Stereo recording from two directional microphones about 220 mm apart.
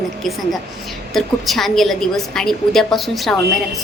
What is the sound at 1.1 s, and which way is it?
A woman's voice, centre (ahead or behind).